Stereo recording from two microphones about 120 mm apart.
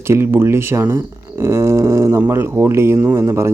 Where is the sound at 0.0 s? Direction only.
20° right (ahead or behind).